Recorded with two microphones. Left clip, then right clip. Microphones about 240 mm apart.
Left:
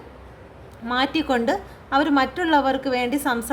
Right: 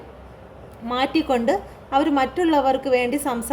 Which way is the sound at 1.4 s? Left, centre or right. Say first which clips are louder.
Right 2 dB; left.